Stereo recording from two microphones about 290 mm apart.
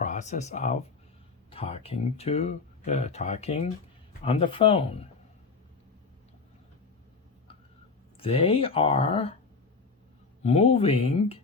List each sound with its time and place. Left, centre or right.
0.0 s speech: left
8.2 s speech: centre
10.4 s speech: left